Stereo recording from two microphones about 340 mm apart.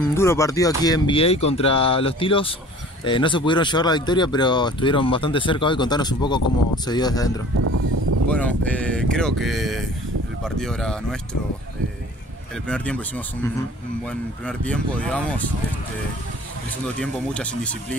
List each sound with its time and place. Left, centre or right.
0.1 s speech: centre
7.5 s a sound: right
8.3 s speech: centre
12.6 s speech: centre
16.8 s speech: centre